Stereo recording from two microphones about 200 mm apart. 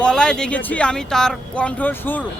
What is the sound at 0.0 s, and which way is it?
Speech, 5° left (ahead or behind).